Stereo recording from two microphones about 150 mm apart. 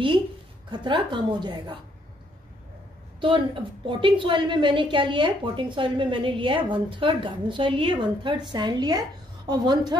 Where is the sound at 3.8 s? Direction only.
35° right (ahead or behind).